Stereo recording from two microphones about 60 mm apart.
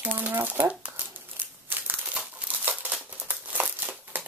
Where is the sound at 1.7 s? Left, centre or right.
Right.